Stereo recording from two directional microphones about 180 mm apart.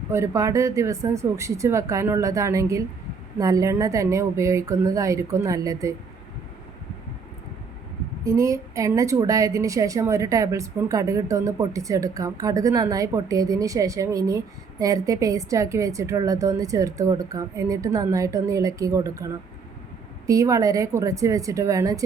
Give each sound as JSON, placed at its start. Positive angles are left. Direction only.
{"t": 0.1, "sound": "a woman's voice", "side_deg": -15}
{"t": 8.2, "sound": "a woman's voice", "side_deg": -15}